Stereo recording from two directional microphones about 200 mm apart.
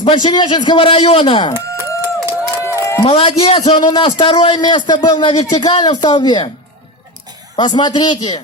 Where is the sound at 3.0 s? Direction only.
25° left (ahead or behind).